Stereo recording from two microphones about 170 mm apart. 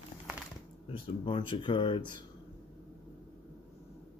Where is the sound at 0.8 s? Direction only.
30° left (ahead or behind).